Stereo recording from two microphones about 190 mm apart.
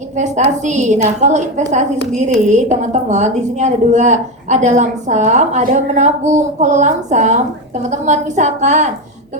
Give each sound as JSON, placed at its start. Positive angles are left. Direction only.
{"t": 0.6, "sound": "a woman's voice", "side_deg": -40}